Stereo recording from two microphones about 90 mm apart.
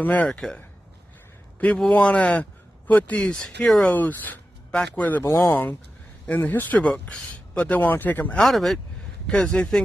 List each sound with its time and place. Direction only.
0.0 s speech: 20° left (ahead or behind)
0.3 s speech: 5° left (ahead or behind)
1.9 s speech: 15° left (ahead or behind)
3.2 s speech: 5° left (ahead or behind)
3.9 s speech: 20° left (ahead or behind)
5.2 s speech: 30° left (ahead or behind)
8.4 s speech: centre (ahead or behind)